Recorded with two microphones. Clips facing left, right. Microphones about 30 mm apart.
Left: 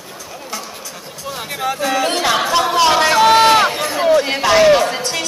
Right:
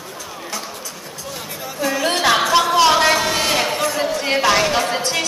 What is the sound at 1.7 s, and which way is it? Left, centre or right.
Speech, left.